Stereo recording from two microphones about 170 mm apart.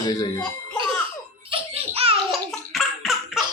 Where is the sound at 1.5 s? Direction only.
35° right (ahead or behind).